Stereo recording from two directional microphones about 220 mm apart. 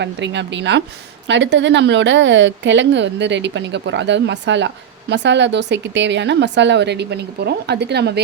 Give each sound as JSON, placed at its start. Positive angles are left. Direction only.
{"t": 0.0, "sound": "a woman's voice", "side_deg": -55}